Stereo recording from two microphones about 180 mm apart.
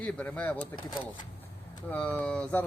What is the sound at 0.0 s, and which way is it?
Speech, 10° left (ahead or behind).